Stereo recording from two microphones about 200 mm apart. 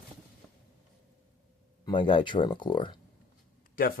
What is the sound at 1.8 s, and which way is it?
Speech, 25° left (ahead or behind).